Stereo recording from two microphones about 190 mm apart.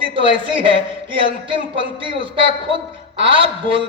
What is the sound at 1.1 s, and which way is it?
A man's voice, 25° right (ahead or behind).